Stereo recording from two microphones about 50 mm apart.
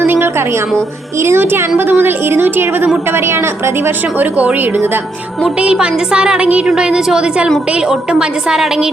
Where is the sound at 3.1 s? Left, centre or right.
Right.